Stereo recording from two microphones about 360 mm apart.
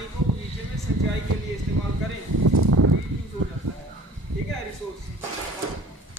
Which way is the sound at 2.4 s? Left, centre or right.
Right.